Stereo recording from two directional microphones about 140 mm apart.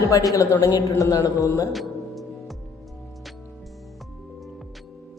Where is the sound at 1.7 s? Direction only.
Centre (ahead or behind).